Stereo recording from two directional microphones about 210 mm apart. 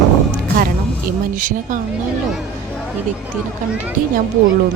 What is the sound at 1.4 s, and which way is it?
Speech, 40° right (ahead or behind).